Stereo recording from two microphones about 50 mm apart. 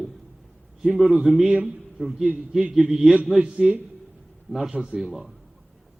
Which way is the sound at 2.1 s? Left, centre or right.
Centre.